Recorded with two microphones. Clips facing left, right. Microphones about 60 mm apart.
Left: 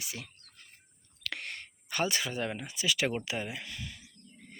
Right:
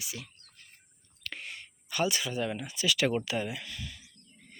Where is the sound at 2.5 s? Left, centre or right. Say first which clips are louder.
Right 2 dB; left.